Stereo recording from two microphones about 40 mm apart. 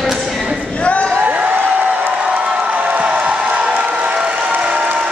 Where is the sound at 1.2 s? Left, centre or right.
Right.